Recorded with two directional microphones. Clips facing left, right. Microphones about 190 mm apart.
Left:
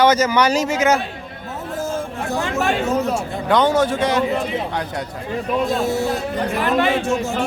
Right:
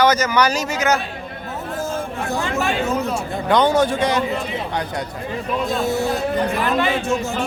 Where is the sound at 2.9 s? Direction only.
45° left (ahead or behind).